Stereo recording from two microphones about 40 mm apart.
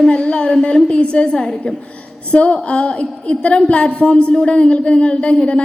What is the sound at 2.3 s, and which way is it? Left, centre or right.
A woman's voice, left.